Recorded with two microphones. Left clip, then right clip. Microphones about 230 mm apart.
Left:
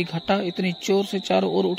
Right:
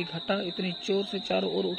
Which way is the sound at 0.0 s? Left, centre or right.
Left.